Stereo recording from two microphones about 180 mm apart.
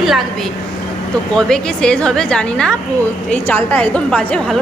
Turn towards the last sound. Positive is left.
turn(degrees=5)  # may be behind; listen again after turning